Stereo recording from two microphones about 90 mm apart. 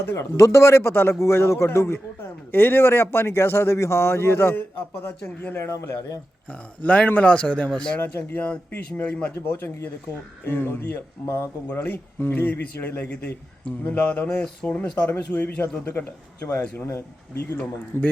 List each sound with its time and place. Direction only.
0.0 s a man's voice: 25° left (ahead or behind)
6.5 s a man's voice: 15° left (ahead or behind)
8.0 s a man's voice: 20° left (ahead or behind)
9.6 s a man's voice: 25° left (ahead or behind)